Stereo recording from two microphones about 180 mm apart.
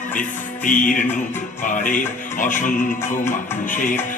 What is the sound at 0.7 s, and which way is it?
Music, 45° left (ahead or behind).